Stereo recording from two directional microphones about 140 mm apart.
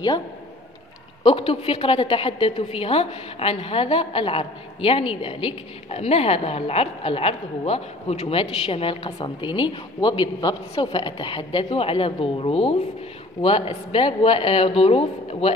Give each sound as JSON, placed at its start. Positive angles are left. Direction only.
{"t": 1.2, "sound": "a woman's voice", "side_deg": 40}